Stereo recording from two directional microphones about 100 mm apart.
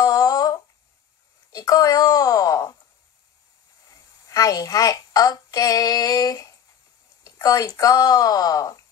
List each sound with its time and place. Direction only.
0.0 s humming: 40° left (ahead or behind)
1.5 s a sound: 35° left (ahead or behind)
4.3 s female singing: 35° left (ahead or behind)
7.2 s speech: 35° left (ahead or behind)